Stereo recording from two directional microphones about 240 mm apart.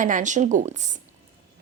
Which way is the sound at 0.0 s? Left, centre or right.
Right.